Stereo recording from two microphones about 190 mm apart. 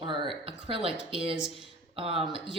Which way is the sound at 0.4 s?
30° right (ahead or behind).